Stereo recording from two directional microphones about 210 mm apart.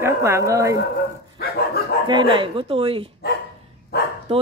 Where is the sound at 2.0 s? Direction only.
20° right (ahead or behind).